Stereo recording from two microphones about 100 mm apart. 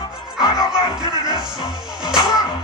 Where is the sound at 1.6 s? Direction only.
40° left (ahead or behind).